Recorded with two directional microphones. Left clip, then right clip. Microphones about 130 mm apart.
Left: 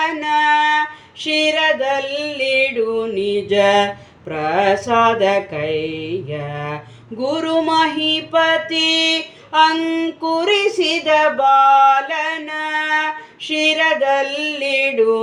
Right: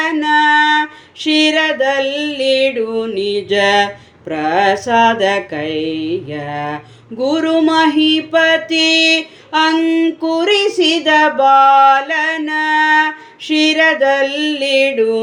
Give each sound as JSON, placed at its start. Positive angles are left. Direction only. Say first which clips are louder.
{"t": 0.0, "sound": "music", "louder": "right 4 dB", "side_deg": -35}